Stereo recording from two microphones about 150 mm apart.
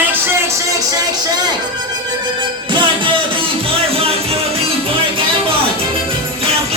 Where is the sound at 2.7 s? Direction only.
35° right (ahead or behind).